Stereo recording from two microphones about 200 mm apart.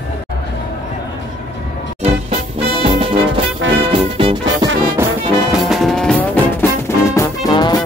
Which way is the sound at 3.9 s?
25° right (ahead or behind).